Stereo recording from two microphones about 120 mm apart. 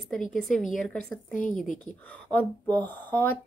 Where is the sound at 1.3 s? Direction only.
90° left.